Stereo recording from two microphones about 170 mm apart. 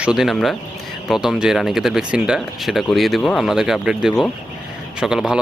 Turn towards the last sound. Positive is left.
turn(degrees=-5)  # may be behind; listen again after turning